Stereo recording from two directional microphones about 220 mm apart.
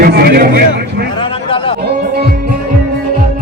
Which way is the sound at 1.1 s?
25° left (ahead or behind).